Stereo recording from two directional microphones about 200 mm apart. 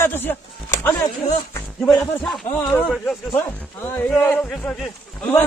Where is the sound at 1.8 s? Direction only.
Centre (ahead or behind).